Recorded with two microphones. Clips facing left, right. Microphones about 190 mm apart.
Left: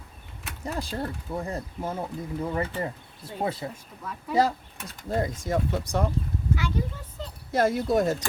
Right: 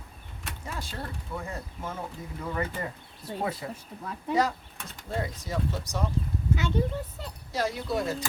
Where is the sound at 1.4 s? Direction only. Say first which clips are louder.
Left 7 dB; 35° left (ahead or behind).